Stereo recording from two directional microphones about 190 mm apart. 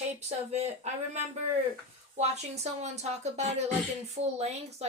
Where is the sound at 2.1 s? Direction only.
35° right (ahead or behind).